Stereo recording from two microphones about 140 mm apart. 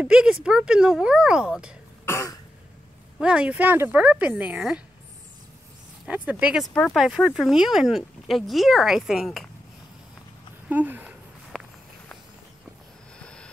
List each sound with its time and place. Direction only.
0.0 s speech: 5° right (ahead or behind)
2.0 s cough: 20° left (ahead or behind)
3.2 s speech: 5° right (ahead or behind)
6.0 s speech: 10° right (ahead or behind)
6.7 s speech: 5° left (ahead or behind)
10.7 s a sound: 10° right (ahead or behind)
11.5 s walk: 5° left (ahead or behind)
13.2 s vehicle: 5° left (ahead or behind)